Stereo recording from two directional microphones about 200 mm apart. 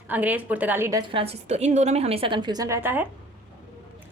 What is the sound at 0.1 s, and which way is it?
A woman's voice, 10° right (ahead or behind).